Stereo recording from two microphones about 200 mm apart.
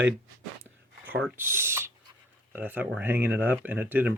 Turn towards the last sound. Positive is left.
turn(degrees=-10)  # may be behind; listen again after turning